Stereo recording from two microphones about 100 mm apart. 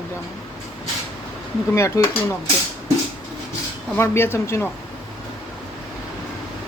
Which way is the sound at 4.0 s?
25° left (ahead or behind).